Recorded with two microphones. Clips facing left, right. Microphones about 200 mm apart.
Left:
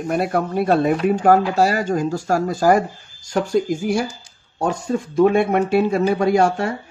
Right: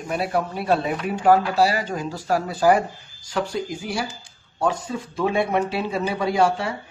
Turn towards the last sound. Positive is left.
turn(degrees=45)  # may be behind; listen again after turning